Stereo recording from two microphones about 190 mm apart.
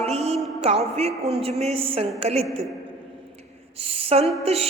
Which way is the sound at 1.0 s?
35° right (ahead or behind).